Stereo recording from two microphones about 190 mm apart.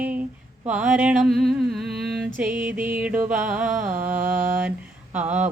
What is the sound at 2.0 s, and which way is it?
Music, centre (ahead or behind).